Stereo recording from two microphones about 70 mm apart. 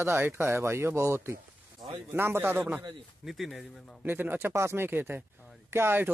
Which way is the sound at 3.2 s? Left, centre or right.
Centre.